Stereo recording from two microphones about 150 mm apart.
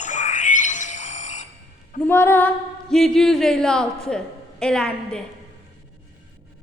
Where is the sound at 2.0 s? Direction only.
15° left (ahead or behind).